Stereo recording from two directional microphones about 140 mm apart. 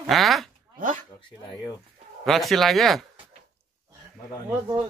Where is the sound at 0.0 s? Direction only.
Centre (ahead or behind).